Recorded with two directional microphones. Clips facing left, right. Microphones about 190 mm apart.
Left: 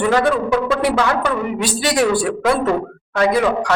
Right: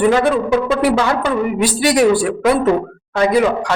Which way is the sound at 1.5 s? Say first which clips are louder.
Right 5 dB; 15° right (ahead or behind).